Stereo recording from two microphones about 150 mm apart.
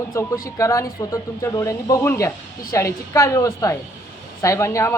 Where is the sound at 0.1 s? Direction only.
20° left (ahead or behind).